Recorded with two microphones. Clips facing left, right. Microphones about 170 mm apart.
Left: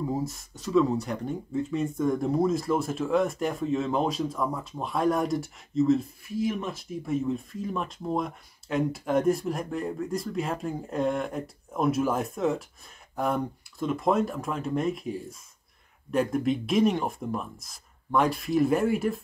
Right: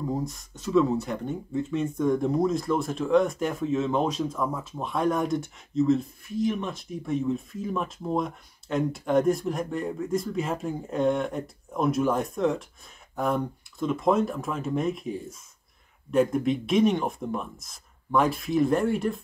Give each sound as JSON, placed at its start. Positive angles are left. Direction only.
{"t": 0.1, "sound": "speech", "side_deg": 5}